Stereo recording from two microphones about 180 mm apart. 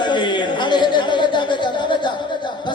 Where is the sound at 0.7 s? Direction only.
25° left (ahead or behind).